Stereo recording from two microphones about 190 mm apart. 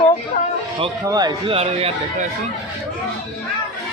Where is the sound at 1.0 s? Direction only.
20° right (ahead or behind).